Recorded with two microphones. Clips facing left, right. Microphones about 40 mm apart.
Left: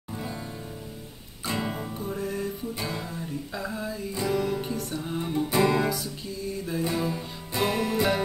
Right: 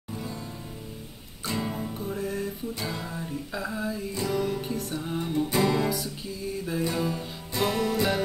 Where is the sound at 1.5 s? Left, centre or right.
Left.